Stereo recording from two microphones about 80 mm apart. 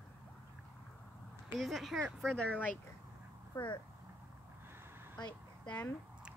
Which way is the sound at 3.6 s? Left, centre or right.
Centre.